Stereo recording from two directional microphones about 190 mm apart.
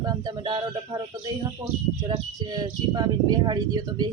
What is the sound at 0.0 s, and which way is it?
Speech, 20° right (ahead or behind).